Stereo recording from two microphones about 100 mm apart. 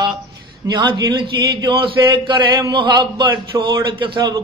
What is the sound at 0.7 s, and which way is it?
Mantra, 50° right (ahead or behind).